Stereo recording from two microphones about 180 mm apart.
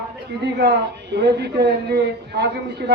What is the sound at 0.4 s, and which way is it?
A woman's voice, 70° right (ahead or behind).